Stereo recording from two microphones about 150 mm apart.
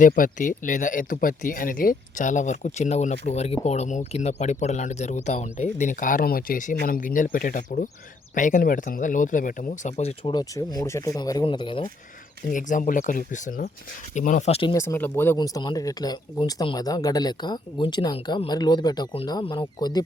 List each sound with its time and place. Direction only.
0.0 s speech: 60° left (ahead or behind)
10.0 s speech: 45° left (ahead or behind)
10.3 s speech: 25° left (ahead or behind)
12.5 s speech: 60° left (ahead or behind); by 14.7 s 45° left (ahead or behind)
14.7 s speech: 20° left (ahead or behind)
15.4 s speech: 25° left (ahead or behind)